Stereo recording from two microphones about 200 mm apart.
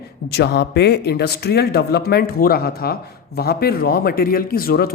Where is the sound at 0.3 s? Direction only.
55° left (ahead or behind).